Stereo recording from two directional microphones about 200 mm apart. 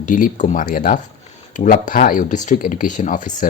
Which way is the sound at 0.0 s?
40° left (ahead or behind).